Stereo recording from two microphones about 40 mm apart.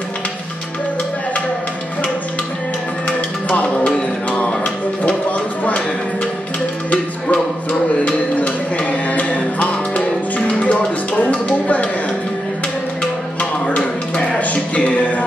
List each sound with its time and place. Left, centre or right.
3.1 s music: left
3.6 s music: left
8.0 s music: left
11.1 s music: left
13.4 s music: left